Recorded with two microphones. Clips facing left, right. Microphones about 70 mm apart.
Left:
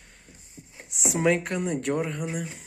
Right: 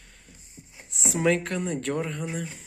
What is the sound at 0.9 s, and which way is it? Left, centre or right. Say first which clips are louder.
Speech: left 2 dB; centre.